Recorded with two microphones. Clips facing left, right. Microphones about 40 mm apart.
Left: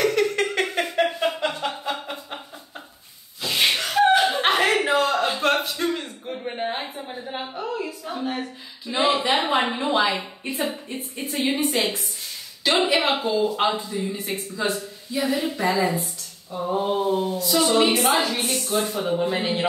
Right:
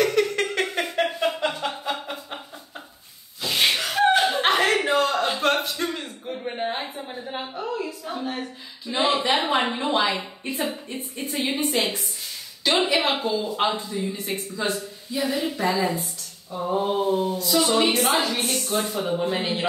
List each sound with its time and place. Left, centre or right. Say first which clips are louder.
0.0 s a sound: even; centre
3.4 s chuckle: even; centre
12.6 s speech: left 1 dB; centre